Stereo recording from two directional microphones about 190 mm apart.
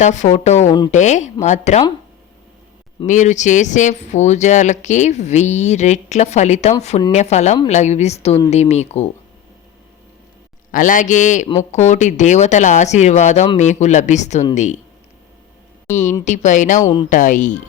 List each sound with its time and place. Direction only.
0.0 s speech: 40° left (ahead or behind)
3.1 s speech: 40° left (ahead or behind)
10.7 s speech: 45° left (ahead or behind)
15.9 s speech: 40° left (ahead or behind)
16.8 s speech: 25° left (ahead or behind)
17.1 s speech: 45° left (ahead or behind)